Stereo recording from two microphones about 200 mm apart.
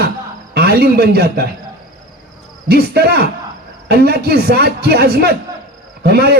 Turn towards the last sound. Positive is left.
turn(degrees=-50)  # may be behind; listen again after turning